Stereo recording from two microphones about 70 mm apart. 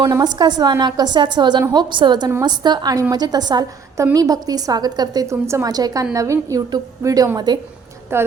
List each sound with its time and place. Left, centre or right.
0.2 s a woman's voice: right
4.1 s a woman's voice: right
5.3 s a woman's voice: right
5.6 s a woman's voice: right
6.1 s a woman's voice: right
7.0 s a woman's voice: right
7.3 s a woman's voice: right
8.1 s a woman's voice: right